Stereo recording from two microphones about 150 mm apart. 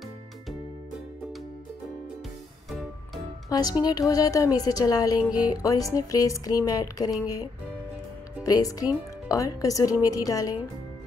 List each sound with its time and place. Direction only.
3.4 s speech: 25° left (ahead or behind)
8.5 s speech: 25° left (ahead or behind)